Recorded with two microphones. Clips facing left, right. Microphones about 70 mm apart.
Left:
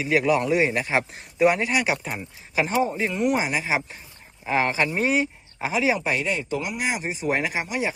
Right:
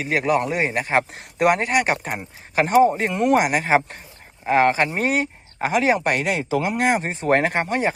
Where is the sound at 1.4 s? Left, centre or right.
Right.